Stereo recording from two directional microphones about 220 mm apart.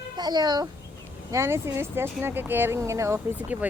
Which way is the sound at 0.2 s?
20° right (ahead or behind).